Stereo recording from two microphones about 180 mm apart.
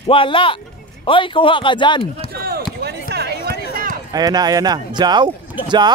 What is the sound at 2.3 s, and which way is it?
Basketball bounce, 60° right (ahead or behind).